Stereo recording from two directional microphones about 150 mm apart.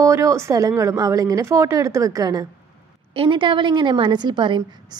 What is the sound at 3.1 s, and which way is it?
A woman's voice, 35° right (ahead or behind).